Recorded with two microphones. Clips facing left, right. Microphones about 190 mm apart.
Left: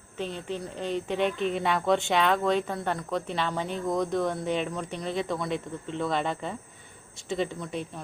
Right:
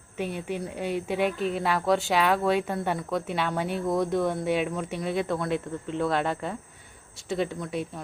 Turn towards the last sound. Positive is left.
turn(degrees=-5)  # may be behind; listen again after turning